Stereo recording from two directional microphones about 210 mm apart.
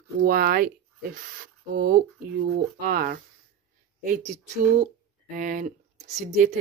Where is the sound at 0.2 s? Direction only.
40° right (ahead or behind).